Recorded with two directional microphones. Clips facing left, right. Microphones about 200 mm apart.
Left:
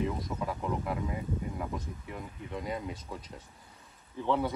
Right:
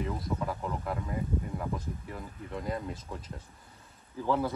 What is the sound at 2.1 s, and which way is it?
Speech, centre (ahead or behind).